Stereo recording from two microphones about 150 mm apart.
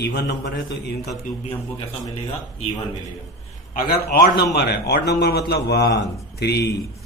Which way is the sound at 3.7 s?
70° left (ahead or behind).